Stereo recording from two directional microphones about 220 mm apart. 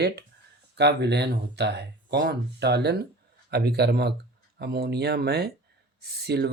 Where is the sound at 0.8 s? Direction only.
50° right (ahead or behind).